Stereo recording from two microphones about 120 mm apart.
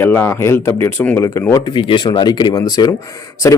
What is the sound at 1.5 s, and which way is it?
Speech, 40° left (ahead or behind).